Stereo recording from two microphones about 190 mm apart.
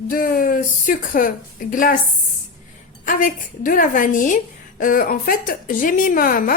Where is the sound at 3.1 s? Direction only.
45° left (ahead or behind).